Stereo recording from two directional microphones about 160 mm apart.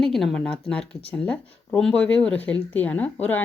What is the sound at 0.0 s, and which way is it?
Speech, centre (ahead or behind).